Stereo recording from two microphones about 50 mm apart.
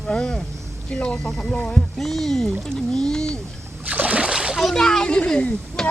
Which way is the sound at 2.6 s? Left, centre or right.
Centre.